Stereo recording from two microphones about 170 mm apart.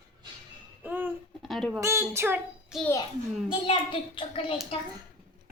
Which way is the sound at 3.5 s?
30° left (ahead or behind).